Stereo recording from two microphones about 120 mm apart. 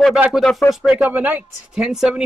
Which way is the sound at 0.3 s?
5° left (ahead or behind).